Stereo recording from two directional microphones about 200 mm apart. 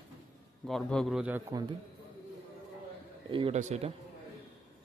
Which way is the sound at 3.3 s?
30° right (ahead or behind).